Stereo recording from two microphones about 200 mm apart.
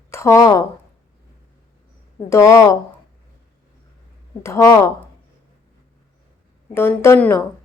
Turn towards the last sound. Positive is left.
turn(degrees=10)  # may be behind; listen again after turning